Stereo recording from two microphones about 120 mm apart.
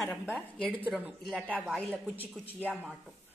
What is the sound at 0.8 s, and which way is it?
Speech, 15° right (ahead or behind).